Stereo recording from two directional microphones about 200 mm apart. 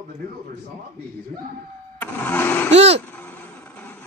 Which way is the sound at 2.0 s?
10° left (ahead or behind).